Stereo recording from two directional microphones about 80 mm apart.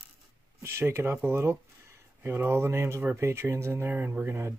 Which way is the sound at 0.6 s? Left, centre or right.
Right.